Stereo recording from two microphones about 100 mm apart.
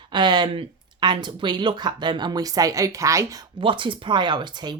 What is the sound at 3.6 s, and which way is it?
Speech, 55° right (ahead or behind).